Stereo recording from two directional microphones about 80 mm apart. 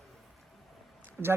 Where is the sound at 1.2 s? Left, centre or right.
Right.